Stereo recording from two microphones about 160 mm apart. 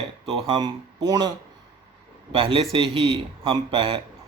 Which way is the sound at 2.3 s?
35° right (ahead or behind).